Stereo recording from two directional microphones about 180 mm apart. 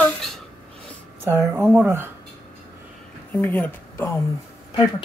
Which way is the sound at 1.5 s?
10° right (ahead or behind).